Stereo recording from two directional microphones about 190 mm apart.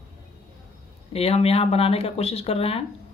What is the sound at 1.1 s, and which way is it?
Speech, 30° left (ahead or behind).